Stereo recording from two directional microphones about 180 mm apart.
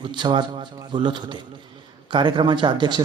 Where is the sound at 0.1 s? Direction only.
25° right (ahead or behind).